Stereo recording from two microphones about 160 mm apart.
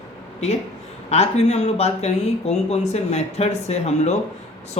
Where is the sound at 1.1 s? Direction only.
40° left (ahead or behind).